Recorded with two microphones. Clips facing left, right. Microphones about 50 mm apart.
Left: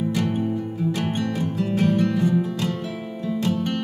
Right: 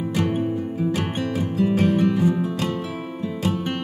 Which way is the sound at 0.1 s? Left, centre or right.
Centre.